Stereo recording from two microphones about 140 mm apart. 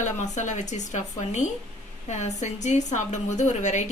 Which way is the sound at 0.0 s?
60° left (ahead or behind).